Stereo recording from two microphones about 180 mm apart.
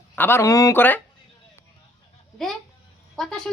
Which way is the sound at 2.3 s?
Centre (ahead or behind).